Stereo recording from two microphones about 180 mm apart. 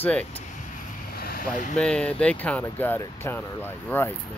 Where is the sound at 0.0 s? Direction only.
10° left (ahead or behind).